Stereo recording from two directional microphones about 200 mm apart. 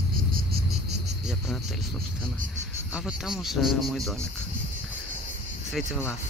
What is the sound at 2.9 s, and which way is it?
Speech, 5° right (ahead or behind).